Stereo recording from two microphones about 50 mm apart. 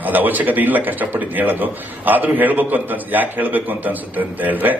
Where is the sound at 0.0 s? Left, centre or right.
Right.